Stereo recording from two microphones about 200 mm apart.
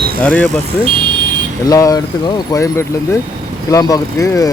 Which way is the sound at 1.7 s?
15° left (ahead or behind).